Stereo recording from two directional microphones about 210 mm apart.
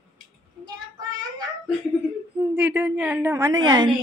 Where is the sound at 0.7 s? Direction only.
20° right (ahead or behind).